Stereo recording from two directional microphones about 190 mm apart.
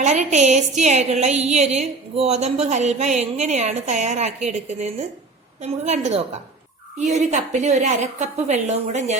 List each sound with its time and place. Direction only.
0.0 s a woman's voice: 40° right (ahead or behind)